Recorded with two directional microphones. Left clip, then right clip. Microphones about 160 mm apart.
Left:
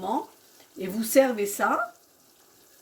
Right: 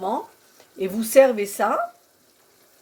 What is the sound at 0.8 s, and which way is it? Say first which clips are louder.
Speech: right 6 dB; 35° right (ahead or behind).